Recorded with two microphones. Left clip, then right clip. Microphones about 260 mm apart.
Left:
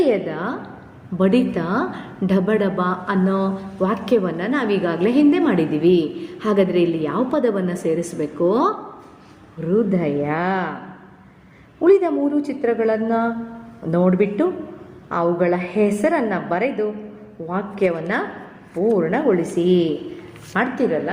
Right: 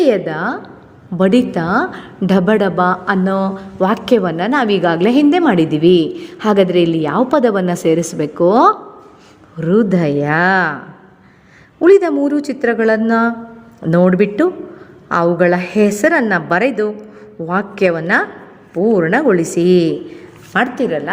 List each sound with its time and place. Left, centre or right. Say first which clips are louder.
0.0 s a woman's voice: right 5 dB; right
11.8 s a woman's voice: right 5 dB; right